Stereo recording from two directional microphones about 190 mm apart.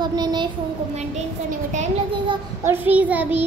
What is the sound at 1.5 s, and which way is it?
Speech, 40° right (ahead or behind).